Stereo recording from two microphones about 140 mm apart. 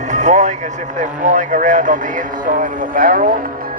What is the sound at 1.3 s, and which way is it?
Speech, 65° right (ahead or behind).